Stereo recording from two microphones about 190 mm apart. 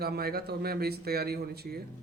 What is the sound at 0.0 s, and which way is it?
A man's voice, 55° right (ahead or behind).